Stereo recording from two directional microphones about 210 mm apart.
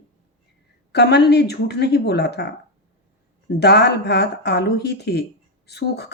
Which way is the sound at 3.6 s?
55° left (ahead or behind).